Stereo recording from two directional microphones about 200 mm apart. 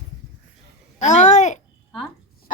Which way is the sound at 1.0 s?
35° left (ahead or behind).